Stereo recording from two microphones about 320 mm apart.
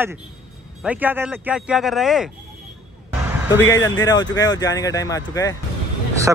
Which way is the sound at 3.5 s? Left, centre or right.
Centre.